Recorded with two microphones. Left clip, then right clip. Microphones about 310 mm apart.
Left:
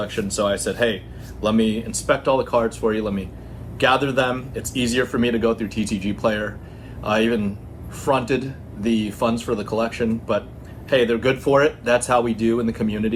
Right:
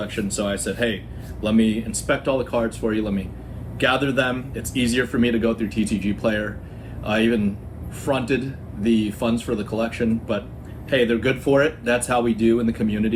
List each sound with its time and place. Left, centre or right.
0.0 s speech: centre